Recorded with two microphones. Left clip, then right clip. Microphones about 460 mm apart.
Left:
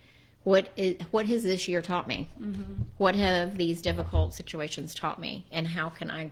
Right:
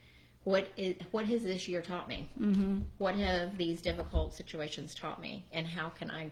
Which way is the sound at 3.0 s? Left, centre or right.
Left.